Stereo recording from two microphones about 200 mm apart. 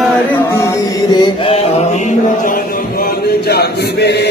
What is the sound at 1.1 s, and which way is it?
Mantra, 25° left (ahead or behind).